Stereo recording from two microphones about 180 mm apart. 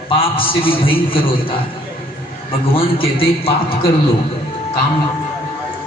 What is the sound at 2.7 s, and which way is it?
Speech, 30° left (ahead or behind).